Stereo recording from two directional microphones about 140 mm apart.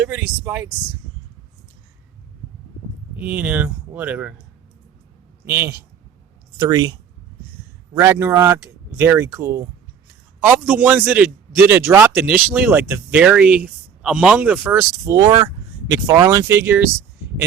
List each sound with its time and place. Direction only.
0.0 s speech: 15° right (ahead or behind)
3.2 s speech: 10° right (ahead or behind)
5.5 s speech: 20° right (ahead or behind)
6.6 s speech: 30° right (ahead or behind)
7.9 s speech: 20° right (ahead or behind)
12.5 s speech: 5° right (ahead or behind)
15.0 s speech: 30° right (ahead or behind)